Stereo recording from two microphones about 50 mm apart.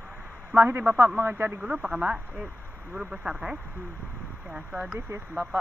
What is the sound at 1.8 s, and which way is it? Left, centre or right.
Speech, centre.